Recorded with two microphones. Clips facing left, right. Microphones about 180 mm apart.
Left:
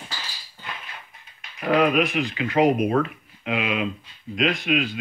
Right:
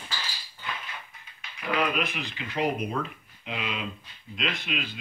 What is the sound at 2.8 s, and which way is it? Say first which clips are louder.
Speech: left 10 dB; 70° left (ahead or behind).